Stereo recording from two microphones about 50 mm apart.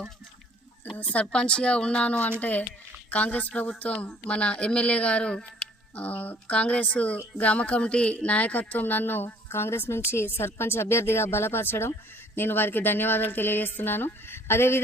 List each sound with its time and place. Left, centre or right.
1.1 s a woman's voice: left
5.9 s a woman's voice: left
9.5 s speech: left